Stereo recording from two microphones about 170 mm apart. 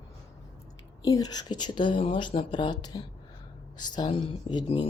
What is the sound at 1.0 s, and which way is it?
Speech, 25° left (ahead or behind).